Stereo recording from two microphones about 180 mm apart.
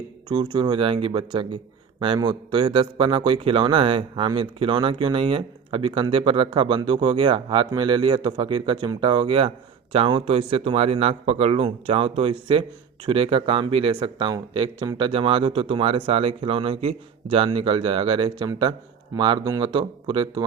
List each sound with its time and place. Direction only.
0.3 s a man's voice: 25° right (ahead or behind)